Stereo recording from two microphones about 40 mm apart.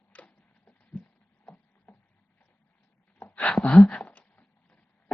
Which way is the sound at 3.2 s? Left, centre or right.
Left.